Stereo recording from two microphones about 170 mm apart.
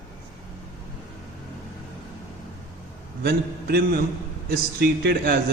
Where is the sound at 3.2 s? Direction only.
65° right (ahead or behind).